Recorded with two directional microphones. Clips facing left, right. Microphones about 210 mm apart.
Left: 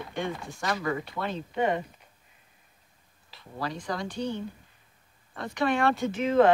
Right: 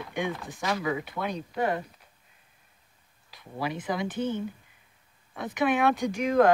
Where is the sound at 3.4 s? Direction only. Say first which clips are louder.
Right 2 dB; 10° right (ahead or behind).